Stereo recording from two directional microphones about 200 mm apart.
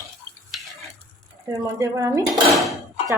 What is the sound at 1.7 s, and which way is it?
Speech, 15° right (ahead or behind).